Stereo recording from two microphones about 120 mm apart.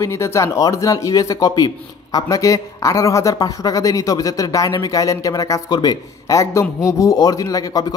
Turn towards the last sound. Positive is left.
turn(degrees=30)  # may be behind; listen again after turning